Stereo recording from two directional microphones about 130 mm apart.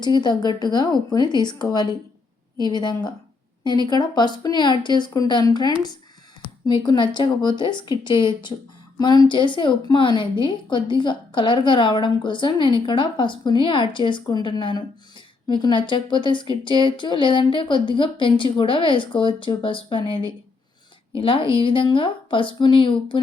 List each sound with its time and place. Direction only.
0.0 s a woman's voice: 35° left (ahead or behind)